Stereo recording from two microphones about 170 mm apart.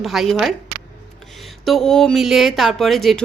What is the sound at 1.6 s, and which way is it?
A woman's voice, centre (ahead or behind).